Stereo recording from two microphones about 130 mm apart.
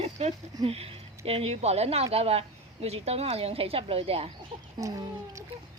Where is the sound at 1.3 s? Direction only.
50° right (ahead or behind).